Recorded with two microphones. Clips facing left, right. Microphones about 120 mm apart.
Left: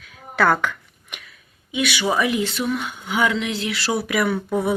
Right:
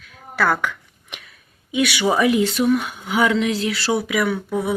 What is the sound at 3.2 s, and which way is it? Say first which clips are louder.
Speech: right 4 dB; 35° right (ahead or behind).